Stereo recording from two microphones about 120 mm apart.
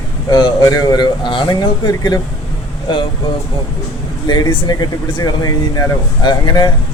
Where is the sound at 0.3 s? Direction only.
35° left (ahead or behind).